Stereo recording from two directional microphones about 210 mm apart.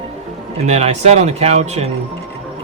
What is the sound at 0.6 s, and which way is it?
Speech, 30° right (ahead or behind).